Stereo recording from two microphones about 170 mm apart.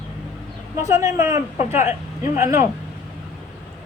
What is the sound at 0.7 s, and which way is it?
A woman's voice, 20° right (ahead or behind).